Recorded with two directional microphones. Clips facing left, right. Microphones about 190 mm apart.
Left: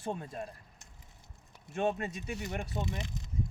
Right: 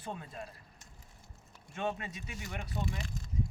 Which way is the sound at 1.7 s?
45° left (ahead or behind).